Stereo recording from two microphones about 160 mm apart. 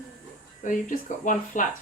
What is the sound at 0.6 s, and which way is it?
Speech, 55° left (ahead or behind).